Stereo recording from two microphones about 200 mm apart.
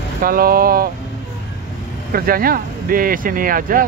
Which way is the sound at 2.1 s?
45° right (ahead or behind).